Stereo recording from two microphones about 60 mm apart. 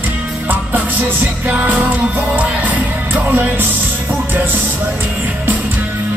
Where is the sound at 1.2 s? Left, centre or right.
Right.